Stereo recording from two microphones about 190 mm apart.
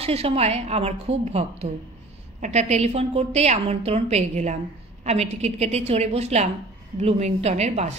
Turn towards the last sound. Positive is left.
turn(degrees=-35)  # may be behind; listen again after turning